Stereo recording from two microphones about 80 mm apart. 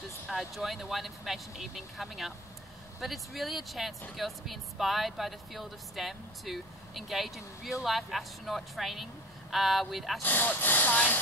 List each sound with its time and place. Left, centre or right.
0.3 s speech: centre
10.2 s speech: left